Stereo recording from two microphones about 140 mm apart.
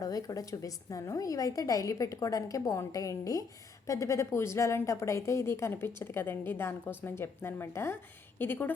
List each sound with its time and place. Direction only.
0.0 s a woman's voice: 25° left (ahead or behind)